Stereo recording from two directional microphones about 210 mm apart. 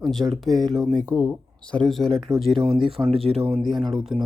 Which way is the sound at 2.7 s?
25° right (ahead or behind).